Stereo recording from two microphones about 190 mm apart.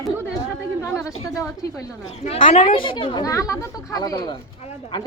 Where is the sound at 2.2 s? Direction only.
35° left (ahead or behind).